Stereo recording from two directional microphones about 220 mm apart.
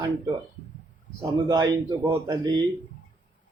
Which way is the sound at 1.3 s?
15° right (ahead or behind).